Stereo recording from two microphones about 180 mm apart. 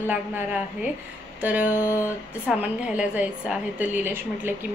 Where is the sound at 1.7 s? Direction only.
15° left (ahead or behind).